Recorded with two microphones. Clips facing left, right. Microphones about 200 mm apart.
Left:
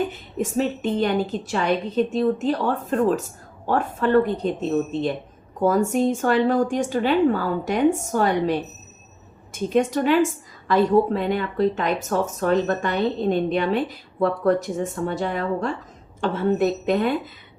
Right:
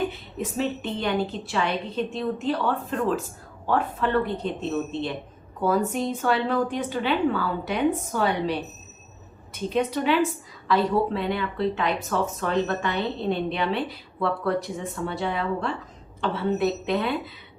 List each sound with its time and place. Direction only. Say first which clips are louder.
0.1 s a woman's voice: left 6 dB; 45° left (ahead or behind)